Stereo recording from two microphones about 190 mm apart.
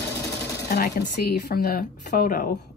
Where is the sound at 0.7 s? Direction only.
55° left (ahead or behind).